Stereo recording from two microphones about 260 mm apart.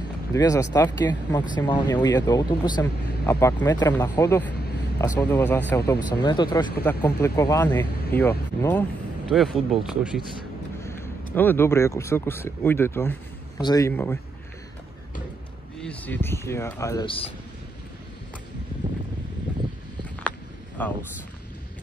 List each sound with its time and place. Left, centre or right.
0.3 s speech: centre
10.8 s speech: centre
15.8 s speech: centre
20.2 s a sound: centre